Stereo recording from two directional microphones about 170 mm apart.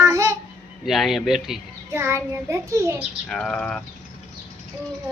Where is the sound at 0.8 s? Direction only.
Centre (ahead or behind).